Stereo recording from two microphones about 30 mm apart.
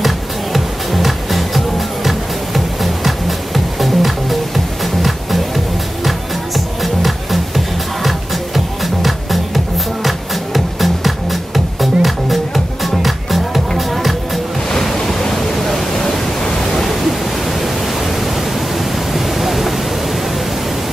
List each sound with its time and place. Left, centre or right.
0.0 s music: centre
6.0 s music: centre
14.8 s waves: centre
15.3 s a sound: centre
16.0 s pink noise: centre
17.6 s pink noise: centre